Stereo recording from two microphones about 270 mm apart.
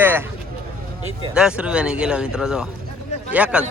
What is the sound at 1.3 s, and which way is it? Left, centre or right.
Speech, centre.